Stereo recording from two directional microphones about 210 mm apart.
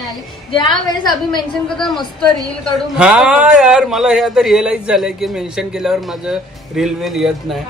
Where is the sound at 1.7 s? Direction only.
Centre (ahead or behind).